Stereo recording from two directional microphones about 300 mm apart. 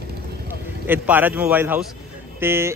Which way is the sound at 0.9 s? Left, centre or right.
Centre.